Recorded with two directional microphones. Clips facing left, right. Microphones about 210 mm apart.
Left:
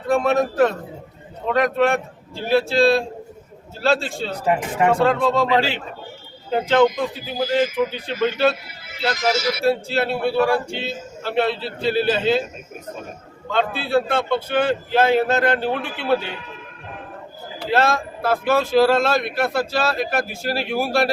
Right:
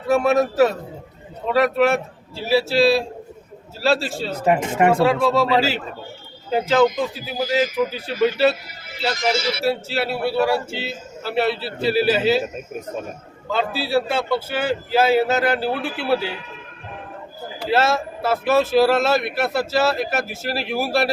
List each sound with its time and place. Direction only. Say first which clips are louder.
0.1 s a man's voice: right 1 dB; 5° right (ahead or behind)
9.1 s a man's voice: left 1 dB; 30° right (ahead or behind)
9.6 s speech: left 4 dB; 5° right (ahead or behind)
13.5 s a man's voice: left 1 dB; 5° right (ahead or behind)
17.7 s speech: even; 5° right (ahead or behind)